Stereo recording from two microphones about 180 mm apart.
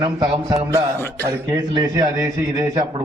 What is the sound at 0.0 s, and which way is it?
Speech, 25° right (ahead or behind).